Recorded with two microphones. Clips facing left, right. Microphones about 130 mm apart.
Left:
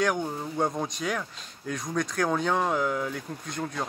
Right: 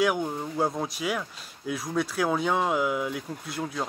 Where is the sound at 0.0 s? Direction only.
5° right (ahead or behind).